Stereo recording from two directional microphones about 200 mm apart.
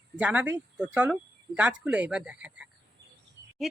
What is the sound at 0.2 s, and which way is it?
A woman's voice, 5° right (ahead or behind).